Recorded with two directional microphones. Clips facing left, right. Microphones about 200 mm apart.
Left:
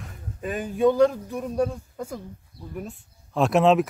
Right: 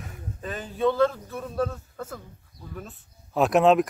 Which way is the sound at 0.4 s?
15° left (ahead or behind).